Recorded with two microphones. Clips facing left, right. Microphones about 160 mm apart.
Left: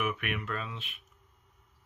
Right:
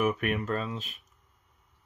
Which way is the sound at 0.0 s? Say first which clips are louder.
Right 6 dB; 40° right (ahead or behind).